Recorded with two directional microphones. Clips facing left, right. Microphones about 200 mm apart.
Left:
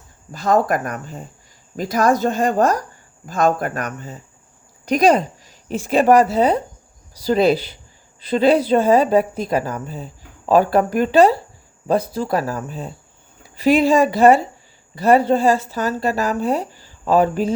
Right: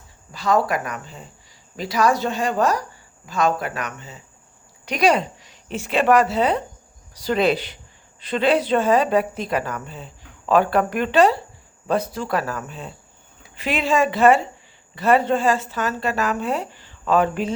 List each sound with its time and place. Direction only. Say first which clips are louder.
0.3 s a woman's voice: left 3 dB; 50° left (ahead or behind)